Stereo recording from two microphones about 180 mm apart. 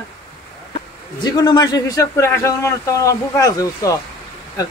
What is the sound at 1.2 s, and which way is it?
A man's voice, 20° left (ahead or behind).